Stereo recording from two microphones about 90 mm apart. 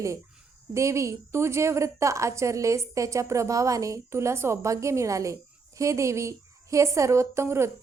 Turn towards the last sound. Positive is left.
turn(degrees=-30)  # may be behind; listen again after turning